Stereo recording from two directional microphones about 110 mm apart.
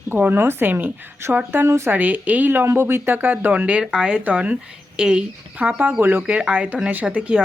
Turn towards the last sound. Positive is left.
turn(degrees=-10)  # may be behind; listen again after turning